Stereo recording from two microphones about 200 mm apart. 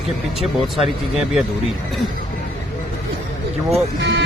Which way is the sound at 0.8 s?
Centre (ahead or behind).